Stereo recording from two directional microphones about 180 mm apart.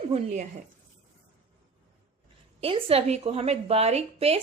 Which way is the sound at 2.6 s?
35° right (ahead or behind).